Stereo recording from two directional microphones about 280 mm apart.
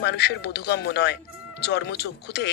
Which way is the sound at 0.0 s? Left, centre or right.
Left.